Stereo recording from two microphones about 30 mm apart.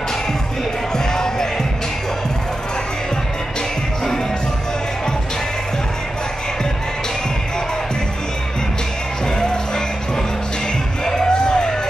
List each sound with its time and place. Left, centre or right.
0.9 s music: left
11.3 s music: left